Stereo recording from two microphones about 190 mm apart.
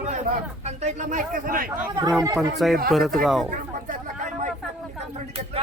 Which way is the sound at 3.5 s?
45° right (ahead or behind).